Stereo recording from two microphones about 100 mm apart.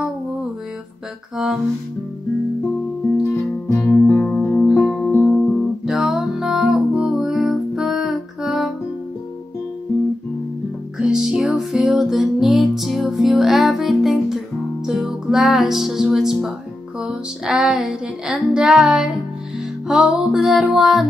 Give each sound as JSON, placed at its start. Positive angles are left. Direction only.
{"t": 1.3, "sound": "music", "side_deg": -5}
{"t": 3.3, "sound": "music", "side_deg": 25}
{"t": 5.9, "sound": "music", "side_deg": -5}
{"t": 11.0, "sound": "music", "side_deg": -5}